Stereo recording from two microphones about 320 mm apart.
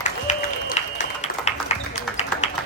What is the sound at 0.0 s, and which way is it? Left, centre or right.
Applause, left.